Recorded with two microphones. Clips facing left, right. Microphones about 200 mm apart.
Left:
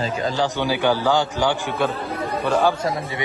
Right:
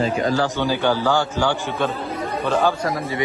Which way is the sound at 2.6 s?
25° left (ahead or behind).